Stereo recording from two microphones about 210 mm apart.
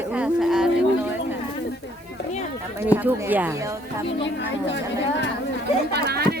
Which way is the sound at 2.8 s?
10° right (ahead or behind).